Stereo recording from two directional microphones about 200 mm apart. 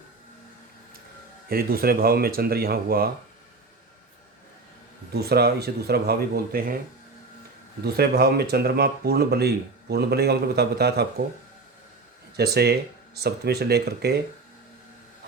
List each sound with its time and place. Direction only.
1.5 s speech: 50° right (ahead or behind)
5.1 s speech: 50° right (ahead or behind)
7.9 s speech: 50° right (ahead or behind)
12.4 s speech: 55° right (ahead or behind)